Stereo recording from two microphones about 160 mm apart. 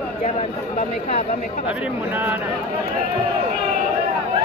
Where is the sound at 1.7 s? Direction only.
10° right (ahead or behind).